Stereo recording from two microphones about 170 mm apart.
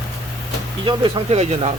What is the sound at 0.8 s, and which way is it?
Speech, 30° right (ahead or behind).